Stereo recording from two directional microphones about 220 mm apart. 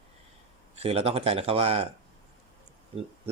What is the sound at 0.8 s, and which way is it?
Speech, 25° right (ahead or behind).